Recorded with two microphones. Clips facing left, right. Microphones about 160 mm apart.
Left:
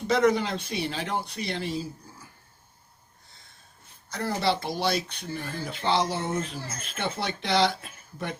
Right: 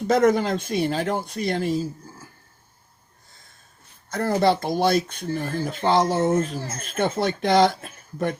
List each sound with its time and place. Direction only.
0.1 s speech: 45° right (ahead or behind)
4.1 s speech: 50° right (ahead or behind)